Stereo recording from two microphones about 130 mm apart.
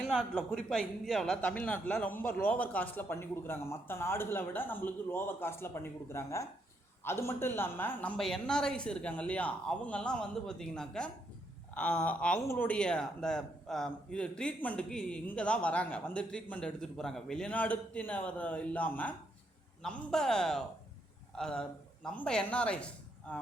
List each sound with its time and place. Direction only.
0.0 s a man's voice: 5° left (ahead or behind)